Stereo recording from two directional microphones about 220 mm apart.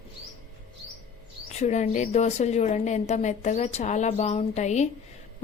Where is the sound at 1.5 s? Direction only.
30° left (ahead or behind).